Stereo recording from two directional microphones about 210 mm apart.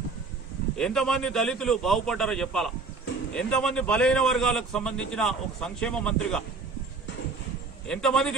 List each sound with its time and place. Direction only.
0.7 s a man's voice: 5° left (ahead or behind)
7.9 s a man's voice: 5° left (ahead or behind)